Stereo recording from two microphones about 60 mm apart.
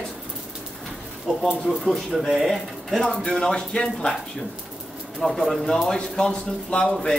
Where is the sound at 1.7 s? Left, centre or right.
Centre.